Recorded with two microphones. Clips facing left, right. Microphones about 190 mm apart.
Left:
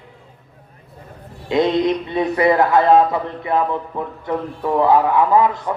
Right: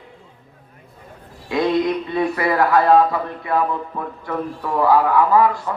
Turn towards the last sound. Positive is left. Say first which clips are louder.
# even
turn(degrees=20)  # may be behind; listen again after turning